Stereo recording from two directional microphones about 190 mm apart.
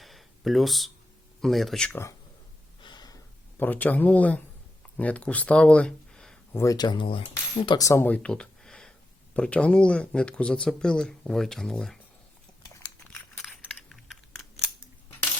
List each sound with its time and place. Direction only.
0.0 s a sound: centre (ahead or behind)
1.4 s speech: centre (ahead or behind)
2.8 s gasp: 20° left (ahead or behind)
3.6 s speech: 10° left (ahead or behind)
6.6 s speech: 20° left (ahead or behind); by 11.9 s 5° left (ahead or behind)
12.7 s a sound: 10° left (ahead or behind)
13.7 s typing: centre (ahead or behind)